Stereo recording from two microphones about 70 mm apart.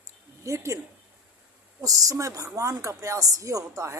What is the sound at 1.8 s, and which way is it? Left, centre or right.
Speech, right.